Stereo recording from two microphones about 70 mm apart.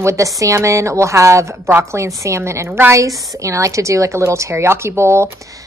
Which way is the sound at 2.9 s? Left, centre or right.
Right.